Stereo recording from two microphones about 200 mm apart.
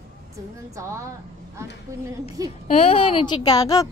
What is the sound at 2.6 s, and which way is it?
A woman's voice, 30° left (ahead or behind).